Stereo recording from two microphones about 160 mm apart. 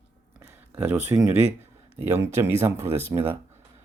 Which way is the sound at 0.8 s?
10° right (ahead or behind).